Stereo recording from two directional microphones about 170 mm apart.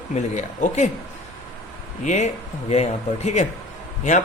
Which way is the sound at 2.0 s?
45° left (ahead or behind).